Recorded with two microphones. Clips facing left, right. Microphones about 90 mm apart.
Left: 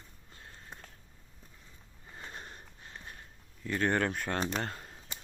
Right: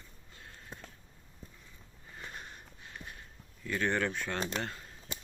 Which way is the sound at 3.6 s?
35° left (ahead or behind).